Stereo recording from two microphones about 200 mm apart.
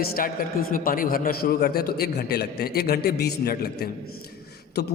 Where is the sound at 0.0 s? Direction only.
45° left (ahead or behind).